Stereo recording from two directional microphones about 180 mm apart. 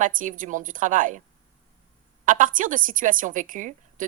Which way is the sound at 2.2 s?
45° right (ahead or behind).